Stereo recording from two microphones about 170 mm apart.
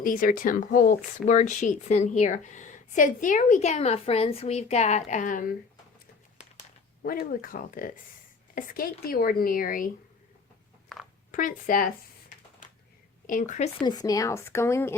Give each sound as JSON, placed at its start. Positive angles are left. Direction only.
{"t": 0.0, "sound": "speech", "side_deg": 55}
{"t": 7.0, "sound": "speech", "side_deg": 60}
{"t": 11.3, "sound": "speech", "side_deg": 50}
{"t": 13.2, "sound": "speech", "side_deg": 50}
{"t": 13.8, "sound": "speech", "side_deg": 20}